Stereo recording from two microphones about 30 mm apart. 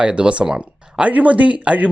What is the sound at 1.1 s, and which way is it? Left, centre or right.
Speech, right.